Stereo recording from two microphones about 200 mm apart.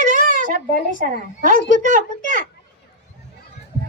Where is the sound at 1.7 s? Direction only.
40° right (ahead or behind).